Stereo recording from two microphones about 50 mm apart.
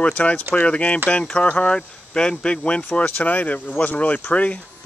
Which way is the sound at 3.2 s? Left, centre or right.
Left.